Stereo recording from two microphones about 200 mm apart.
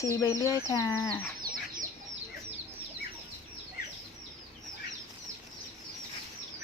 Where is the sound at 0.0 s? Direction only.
20° left (ahead or behind).